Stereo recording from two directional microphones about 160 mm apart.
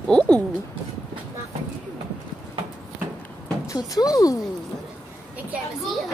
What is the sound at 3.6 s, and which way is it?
Speech, 20° left (ahead or behind).